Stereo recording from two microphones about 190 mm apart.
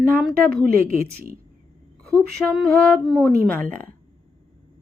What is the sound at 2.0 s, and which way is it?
Speech, 5° left (ahead or behind).